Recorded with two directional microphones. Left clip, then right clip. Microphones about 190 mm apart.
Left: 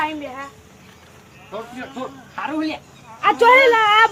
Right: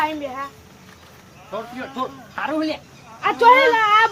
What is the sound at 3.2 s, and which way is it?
Speech, 60° left (ahead or behind).